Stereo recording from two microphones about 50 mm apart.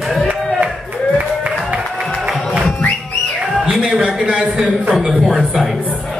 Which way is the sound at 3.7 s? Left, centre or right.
Right.